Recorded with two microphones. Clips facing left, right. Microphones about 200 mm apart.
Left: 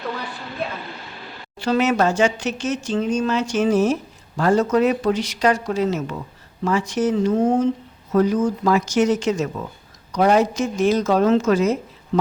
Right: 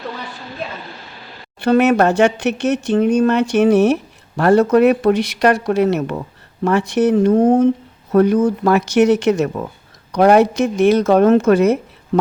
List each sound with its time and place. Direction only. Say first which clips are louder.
1.5 s speech: right 6 dB; 60° right (ahead or behind)